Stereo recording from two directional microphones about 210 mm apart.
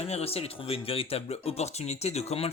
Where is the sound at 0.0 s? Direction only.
30° left (ahead or behind).